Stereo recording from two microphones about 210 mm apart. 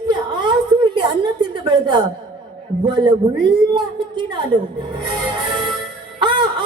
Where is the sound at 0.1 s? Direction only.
20° right (ahead or behind).